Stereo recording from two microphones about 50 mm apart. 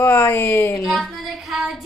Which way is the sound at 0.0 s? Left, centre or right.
Left.